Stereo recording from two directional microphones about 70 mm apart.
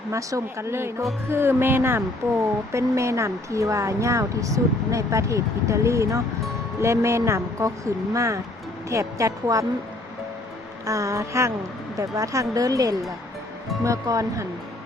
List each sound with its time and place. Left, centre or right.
0.1 s speech: right
2.7 s speech: right
10.8 s speech: right